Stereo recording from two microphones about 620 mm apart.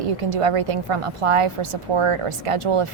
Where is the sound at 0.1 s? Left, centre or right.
Right.